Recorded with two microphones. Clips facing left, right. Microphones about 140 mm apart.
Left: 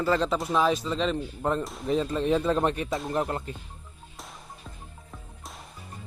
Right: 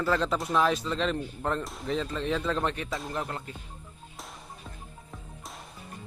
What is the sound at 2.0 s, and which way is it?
Speech, 15° left (ahead or behind).